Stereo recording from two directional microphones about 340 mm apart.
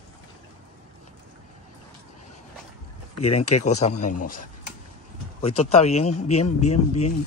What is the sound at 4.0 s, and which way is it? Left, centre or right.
Speech, left.